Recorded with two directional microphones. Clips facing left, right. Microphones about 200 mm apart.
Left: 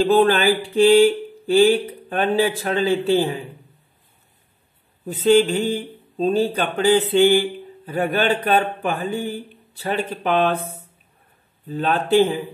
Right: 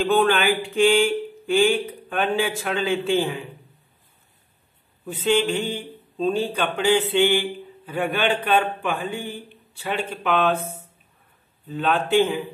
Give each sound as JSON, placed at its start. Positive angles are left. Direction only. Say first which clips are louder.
{"t": 0.0, "sound": "speech", "louder": "left 4 dB", "side_deg": 35}
{"t": 5.0, "sound": "speech", "louder": "left 6 dB", "side_deg": 40}
{"t": 11.7, "sound": "speech", "louder": "left 2 dB", "side_deg": 40}